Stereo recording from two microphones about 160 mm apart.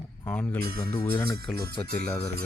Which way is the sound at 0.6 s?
70° right (ahead or behind).